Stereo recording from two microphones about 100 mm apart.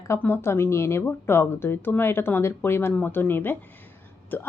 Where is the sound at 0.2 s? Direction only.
20° left (ahead or behind).